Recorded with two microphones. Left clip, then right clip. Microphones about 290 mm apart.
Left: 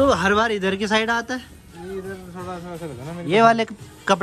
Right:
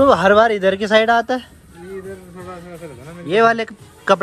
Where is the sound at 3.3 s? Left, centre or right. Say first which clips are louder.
Right 1 dB; centre.